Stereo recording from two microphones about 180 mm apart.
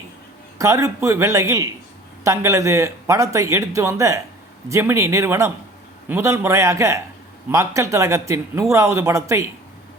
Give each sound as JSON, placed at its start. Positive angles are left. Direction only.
{"t": 0.6, "sound": "speech", "side_deg": -15}